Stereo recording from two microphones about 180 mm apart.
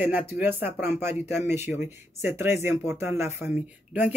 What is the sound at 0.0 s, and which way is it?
Speech, 10° right (ahead or behind).